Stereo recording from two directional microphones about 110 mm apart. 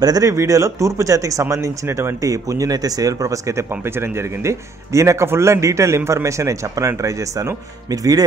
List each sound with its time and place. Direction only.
0.0 s speech: 35° right (ahead or behind)